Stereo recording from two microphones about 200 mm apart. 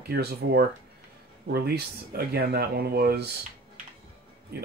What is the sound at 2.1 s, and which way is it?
Speech, 50° right (ahead or behind).